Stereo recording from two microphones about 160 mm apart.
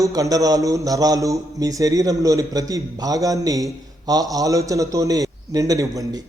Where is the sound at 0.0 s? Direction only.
20° right (ahead or behind).